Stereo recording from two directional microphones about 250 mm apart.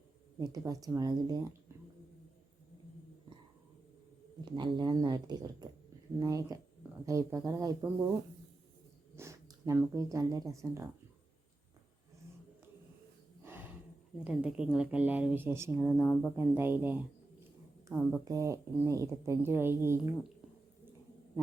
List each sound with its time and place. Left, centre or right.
0.3 s speech: centre
4.4 s speech: centre
9.1 s speech: centre
13.4 s a sound: centre
14.3 s a woman's voice: centre